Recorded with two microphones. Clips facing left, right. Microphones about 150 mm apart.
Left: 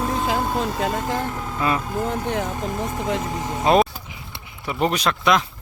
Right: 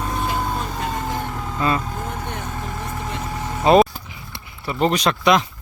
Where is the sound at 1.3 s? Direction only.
Centre (ahead or behind); by 3.6 s 20° left (ahead or behind).